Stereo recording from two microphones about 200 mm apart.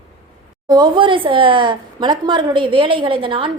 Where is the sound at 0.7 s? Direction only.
20° right (ahead or behind).